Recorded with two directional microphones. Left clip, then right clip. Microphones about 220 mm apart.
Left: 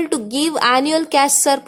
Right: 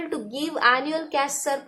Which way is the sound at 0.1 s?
50° left (ahead or behind).